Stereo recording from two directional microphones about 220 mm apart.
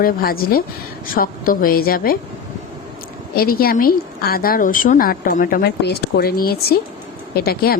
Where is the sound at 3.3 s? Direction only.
40° left (ahead or behind).